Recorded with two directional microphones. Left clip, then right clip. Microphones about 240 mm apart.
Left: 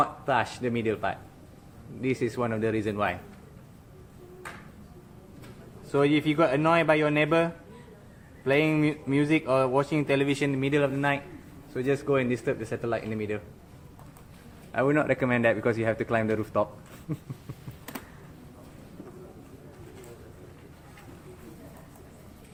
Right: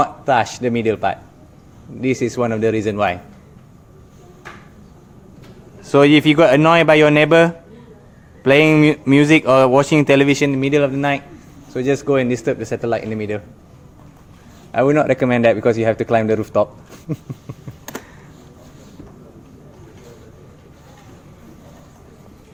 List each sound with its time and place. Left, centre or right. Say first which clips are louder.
0.0 s speech: right 10 dB; right
5.9 s speech: right 13 dB; right
14.7 s a man's voice: right 10 dB; right